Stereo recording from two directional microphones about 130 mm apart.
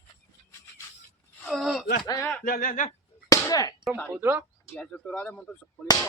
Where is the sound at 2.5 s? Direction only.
85° left.